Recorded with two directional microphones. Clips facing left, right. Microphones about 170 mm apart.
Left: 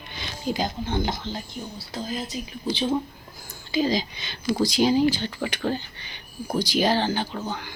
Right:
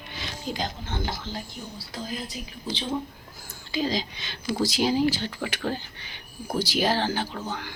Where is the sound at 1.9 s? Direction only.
25° left (ahead or behind).